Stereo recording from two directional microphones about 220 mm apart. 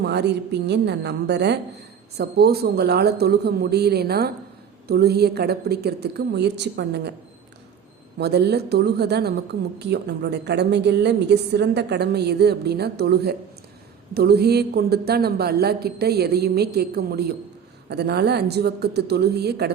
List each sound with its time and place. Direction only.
0.0 s a woman's voice: 50° right (ahead or behind)
8.2 s a woman's voice: 50° right (ahead or behind)